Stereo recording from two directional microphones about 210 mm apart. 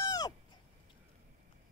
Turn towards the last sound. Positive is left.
turn(degrees=15)  # may be behind; listen again after turning